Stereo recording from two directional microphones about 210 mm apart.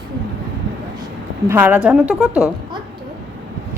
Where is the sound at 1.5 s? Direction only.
10° right (ahead or behind).